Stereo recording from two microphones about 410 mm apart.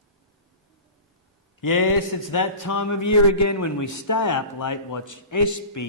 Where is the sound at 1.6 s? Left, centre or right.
Left.